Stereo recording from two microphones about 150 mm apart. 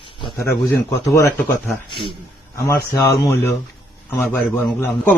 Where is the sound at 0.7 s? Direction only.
20° left (ahead or behind).